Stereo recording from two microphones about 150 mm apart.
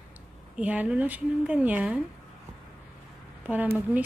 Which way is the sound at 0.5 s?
10° right (ahead or behind).